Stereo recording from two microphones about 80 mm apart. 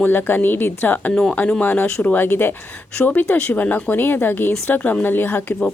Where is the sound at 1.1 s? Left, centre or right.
Centre.